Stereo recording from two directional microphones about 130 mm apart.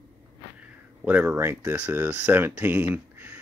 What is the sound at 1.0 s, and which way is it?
Speech, 15° right (ahead or behind).